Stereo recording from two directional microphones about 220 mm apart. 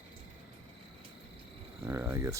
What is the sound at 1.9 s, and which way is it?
Speech, 10° right (ahead or behind).